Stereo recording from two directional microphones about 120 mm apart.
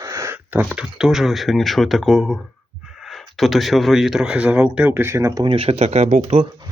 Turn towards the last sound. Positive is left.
turn(degrees=-50)  # may be behind; listen again after turning